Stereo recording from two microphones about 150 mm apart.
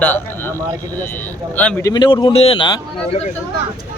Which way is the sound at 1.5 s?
10° left (ahead or behind).